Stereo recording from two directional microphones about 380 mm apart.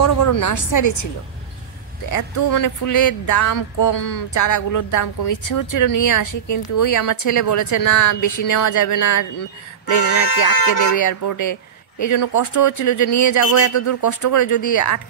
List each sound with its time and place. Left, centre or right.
0.0 s speech: left
2.0 s speech: left
9.9 s speech: left
10.4 s speech: left